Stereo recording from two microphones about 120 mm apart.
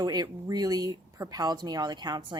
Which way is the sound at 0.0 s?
35° right (ahead or behind).